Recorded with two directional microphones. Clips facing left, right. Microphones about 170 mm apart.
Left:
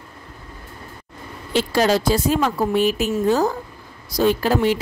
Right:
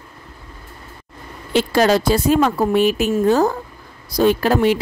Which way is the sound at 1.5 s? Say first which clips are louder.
Right 3 dB; 60° right (ahead or behind).